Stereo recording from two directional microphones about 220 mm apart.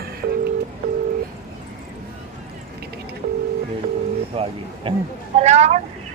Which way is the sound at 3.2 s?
35° right (ahead or behind).